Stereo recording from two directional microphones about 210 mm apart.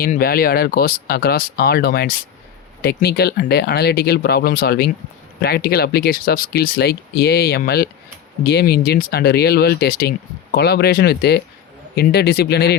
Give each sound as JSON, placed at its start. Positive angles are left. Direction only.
{"t": 0.0, "sound": "speech", "side_deg": 45}